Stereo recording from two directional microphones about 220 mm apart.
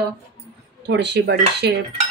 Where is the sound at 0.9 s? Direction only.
50° right (ahead or behind).